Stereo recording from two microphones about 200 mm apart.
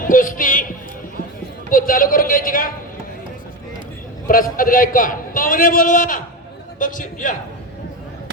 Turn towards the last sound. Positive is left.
turn(degrees=40)  # may be behind; listen again after turning